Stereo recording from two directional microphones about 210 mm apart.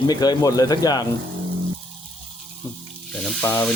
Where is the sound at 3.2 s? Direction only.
10° left (ahead or behind).